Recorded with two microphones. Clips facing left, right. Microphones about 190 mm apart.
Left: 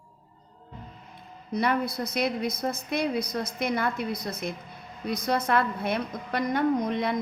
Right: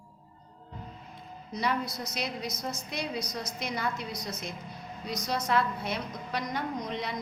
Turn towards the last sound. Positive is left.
turn(degrees=55)  # may be behind; listen again after turning